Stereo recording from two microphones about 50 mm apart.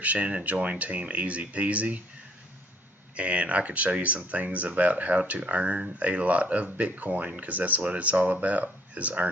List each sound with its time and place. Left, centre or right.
0.0 s speech: right
3.2 s speech: right